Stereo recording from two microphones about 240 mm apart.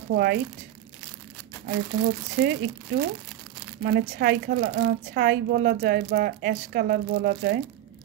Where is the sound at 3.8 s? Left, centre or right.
Right.